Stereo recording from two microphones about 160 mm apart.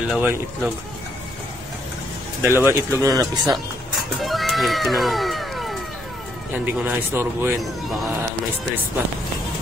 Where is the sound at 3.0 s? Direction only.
20° right (ahead or behind).